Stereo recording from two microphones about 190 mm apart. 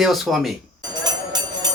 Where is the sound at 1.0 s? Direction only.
20° right (ahead or behind).